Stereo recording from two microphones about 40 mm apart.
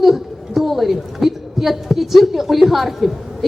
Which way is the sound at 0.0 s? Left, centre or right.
Centre.